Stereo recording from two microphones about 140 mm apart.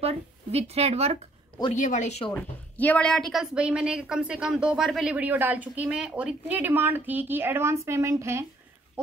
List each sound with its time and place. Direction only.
0.0 s a woman's voice: 50° right (ahead or behind)
1.7 s speech: 65° left (ahead or behind)
2.3 s a woman's voice: 10° left (ahead or behind); by 8.5 s 20° right (ahead or behind)